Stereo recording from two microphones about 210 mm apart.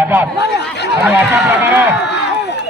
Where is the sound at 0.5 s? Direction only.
55° left (ahead or behind).